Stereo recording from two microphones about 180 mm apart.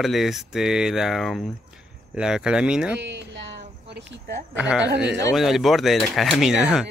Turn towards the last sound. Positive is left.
turn(degrees=-5)  # may be behind; listen again after turning